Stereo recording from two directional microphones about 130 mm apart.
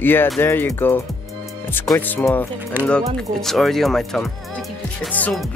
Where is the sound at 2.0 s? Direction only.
15° left (ahead or behind).